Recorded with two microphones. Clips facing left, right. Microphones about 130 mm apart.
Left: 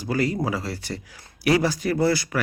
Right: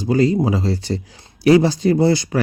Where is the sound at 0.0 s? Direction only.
25° right (ahead or behind).